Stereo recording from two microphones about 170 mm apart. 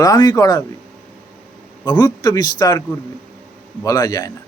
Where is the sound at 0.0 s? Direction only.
20° left (ahead or behind).